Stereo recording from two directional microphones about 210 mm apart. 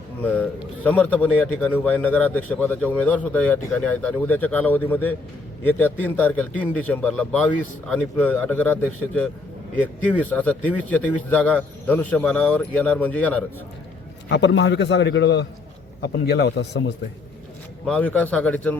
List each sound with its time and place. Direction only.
0.2 s a sound: 10° left (ahead or behind)
0.9 s a man's voice: 5° left (ahead or behind)
14.3 s a man's voice: 55° left (ahead or behind)
17.8 s a man's voice: 5° left (ahead or behind)